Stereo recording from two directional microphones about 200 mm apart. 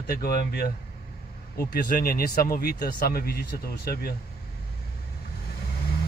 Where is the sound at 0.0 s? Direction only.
50° left (ahead or behind).